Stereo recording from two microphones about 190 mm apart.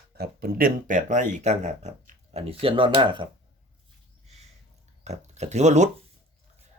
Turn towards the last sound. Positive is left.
turn(degrees=-35)  # may be behind; listen again after turning